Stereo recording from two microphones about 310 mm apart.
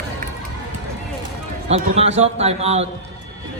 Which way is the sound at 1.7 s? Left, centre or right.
Right.